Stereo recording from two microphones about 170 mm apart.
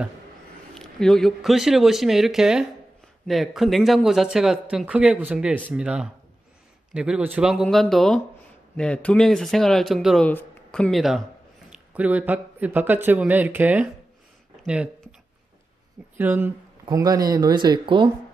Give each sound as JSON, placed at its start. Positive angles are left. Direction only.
{"t": 0.7, "sound": "speech", "side_deg": 5}
{"t": 14.6, "sound": "a sound", "side_deg": -5}
{"t": 16.2, "sound": "speech", "side_deg": -10}
{"t": 16.8, "sound": "speech", "side_deg": -20}